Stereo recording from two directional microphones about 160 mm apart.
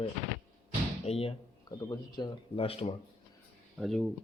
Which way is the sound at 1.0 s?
40° left (ahead or behind).